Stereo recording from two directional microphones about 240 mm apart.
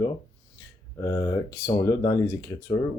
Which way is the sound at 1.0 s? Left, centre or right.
Centre.